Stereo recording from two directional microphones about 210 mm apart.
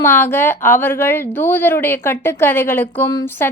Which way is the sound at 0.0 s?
10° left (ahead or behind).